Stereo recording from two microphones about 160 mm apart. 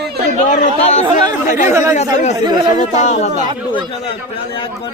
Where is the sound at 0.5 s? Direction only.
50° left (ahead or behind).